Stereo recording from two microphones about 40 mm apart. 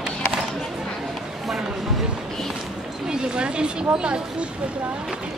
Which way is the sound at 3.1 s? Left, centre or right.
Right.